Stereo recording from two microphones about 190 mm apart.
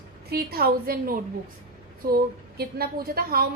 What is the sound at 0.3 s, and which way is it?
A woman's voice, 50° right (ahead or behind).